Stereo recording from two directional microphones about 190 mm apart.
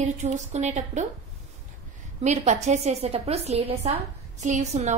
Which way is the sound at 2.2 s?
35° right (ahead or behind).